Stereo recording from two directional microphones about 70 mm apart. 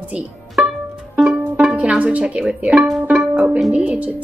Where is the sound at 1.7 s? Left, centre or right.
Centre.